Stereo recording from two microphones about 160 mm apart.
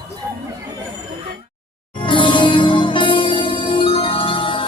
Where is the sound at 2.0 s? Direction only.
30° left (ahead or behind).